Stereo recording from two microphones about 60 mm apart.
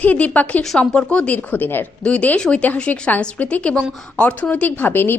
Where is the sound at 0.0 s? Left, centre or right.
Left.